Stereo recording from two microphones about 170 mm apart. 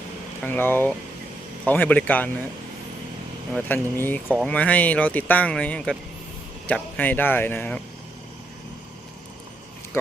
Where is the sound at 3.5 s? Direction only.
10° left (ahead or behind).